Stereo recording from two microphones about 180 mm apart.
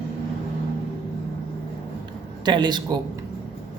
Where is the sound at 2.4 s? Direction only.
25° right (ahead or behind).